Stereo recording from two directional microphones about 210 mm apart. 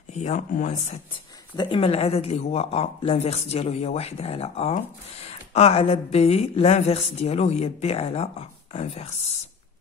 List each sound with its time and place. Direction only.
0.1 s speech: 35° left (ahead or behind)